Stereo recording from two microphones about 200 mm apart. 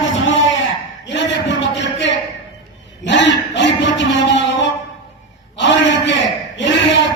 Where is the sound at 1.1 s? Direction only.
65° left (ahead or behind).